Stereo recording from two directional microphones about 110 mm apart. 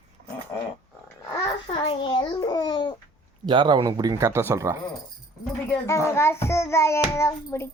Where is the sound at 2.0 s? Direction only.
50° left (ahead or behind).